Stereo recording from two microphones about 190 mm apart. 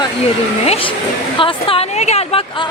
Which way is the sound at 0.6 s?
35° left (ahead or behind).